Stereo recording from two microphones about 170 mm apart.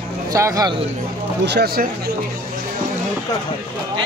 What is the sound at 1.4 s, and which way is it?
Speech, 75° right (ahead or behind).